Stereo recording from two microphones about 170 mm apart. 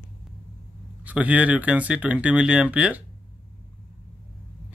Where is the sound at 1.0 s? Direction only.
10° right (ahead or behind).